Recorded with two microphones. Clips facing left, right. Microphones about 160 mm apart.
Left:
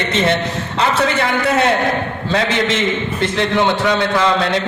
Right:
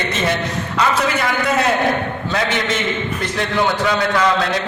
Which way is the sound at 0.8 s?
30° left (ahead or behind).